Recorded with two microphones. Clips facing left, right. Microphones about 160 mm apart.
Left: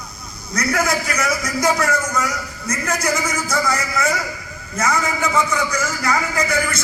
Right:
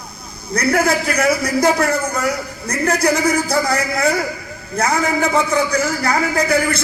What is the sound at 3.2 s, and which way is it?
A man's voice, 35° right (ahead or behind).